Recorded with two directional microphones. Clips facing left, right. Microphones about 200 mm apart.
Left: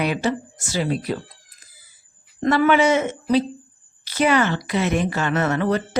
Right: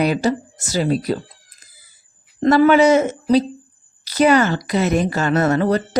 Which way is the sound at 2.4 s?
35° right (ahead or behind).